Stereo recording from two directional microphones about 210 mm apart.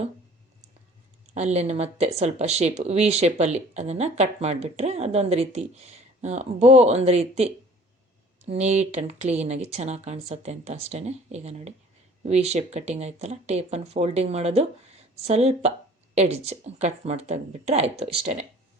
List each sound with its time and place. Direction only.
1.3 s speech: 30° right (ahead or behind)